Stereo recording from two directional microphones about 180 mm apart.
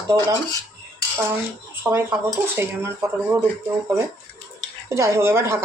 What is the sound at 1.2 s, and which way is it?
Speech, 10° right (ahead or behind).